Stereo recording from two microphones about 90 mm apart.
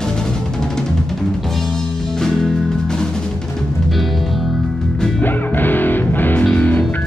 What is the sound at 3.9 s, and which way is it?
Music, centre (ahead or behind).